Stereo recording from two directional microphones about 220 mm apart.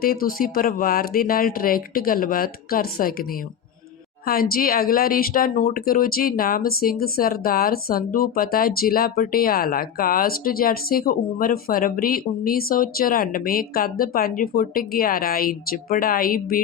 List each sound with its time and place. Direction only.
0.0 s speech: 40° left (ahead or behind)
4.3 s speech: 40° left (ahead or behind)